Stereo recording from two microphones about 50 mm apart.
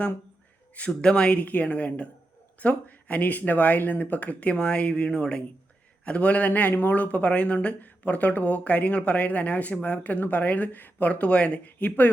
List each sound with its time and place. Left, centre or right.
0.9 s speech: centre; by 12.1 s left